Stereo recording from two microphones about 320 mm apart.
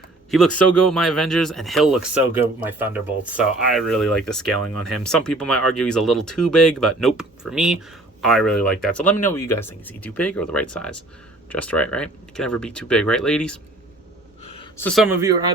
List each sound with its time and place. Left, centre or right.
0.3 s speech: centre
14.4 s a sound: centre
14.8 s speech: centre